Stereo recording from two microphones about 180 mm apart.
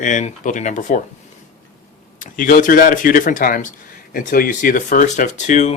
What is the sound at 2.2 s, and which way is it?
Speech, 45° left (ahead or behind).